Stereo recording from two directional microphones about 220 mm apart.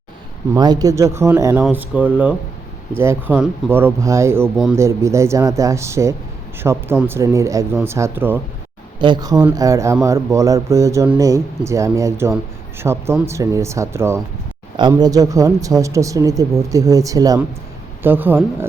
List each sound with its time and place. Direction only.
0.5 s speech: 15° right (ahead or behind)